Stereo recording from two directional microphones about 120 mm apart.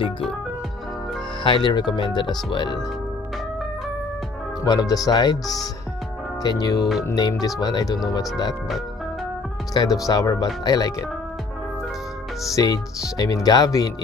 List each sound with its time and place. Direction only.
1.4 s speech: 40° left (ahead or behind)
4.6 s speech: 35° left (ahead or behind)
10.0 s speech: 30° left (ahead or behind)
12.5 s speech: 30° left (ahead or behind)